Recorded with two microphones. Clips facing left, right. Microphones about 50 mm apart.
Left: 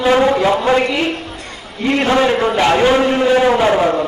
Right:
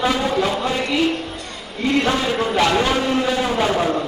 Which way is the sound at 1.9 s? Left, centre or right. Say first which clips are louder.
Left 5 dB; left.